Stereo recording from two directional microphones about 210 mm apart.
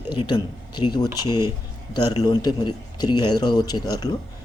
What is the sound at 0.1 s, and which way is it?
A man's voice, 20° left (ahead or behind).